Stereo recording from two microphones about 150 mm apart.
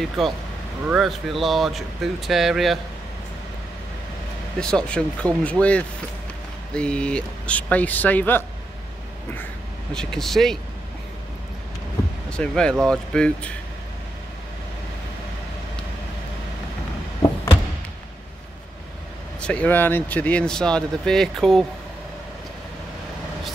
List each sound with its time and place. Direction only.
0.2 s speech: centre (ahead or behind)
4.6 s speech: 5° left (ahead or behind)
9.9 s speech: centre (ahead or behind)
12.3 s speech: 5° left (ahead or behind)
19.4 s speech: 10° left (ahead or behind)